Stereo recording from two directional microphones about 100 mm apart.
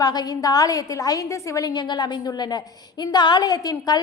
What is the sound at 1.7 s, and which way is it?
A woman's voice, 45° left (ahead or behind).